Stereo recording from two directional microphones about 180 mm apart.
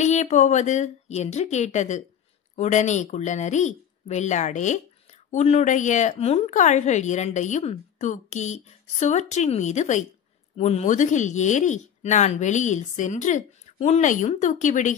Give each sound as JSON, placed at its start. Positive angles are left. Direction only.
{"t": 0.0, "sound": "a woman's voice", "side_deg": 40}